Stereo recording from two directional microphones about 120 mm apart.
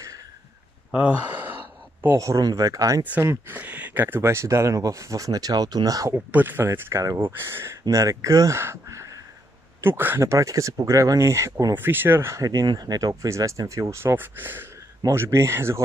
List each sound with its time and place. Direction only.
0.9 s speech: 10° right (ahead or behind)
2.0 s speech: 25° right (ahead or behind)
6.1 s speech: 15° right (ahead or behind)